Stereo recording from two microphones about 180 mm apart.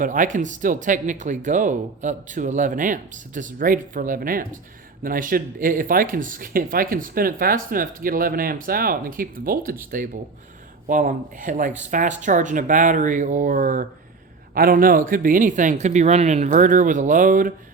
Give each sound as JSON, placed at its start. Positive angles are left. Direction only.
{"t": 0.0, "sound": "speech", "side_deg": -45}
{"t": 10.8, "sound": "speech", "side_deg": -45}